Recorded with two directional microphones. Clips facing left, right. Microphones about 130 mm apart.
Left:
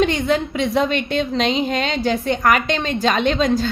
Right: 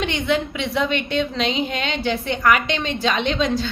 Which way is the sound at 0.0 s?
40° left (ahead or behind).